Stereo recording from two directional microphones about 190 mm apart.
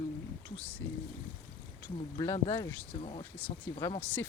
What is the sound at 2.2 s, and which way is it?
Speech, 20° left (ahead or behind).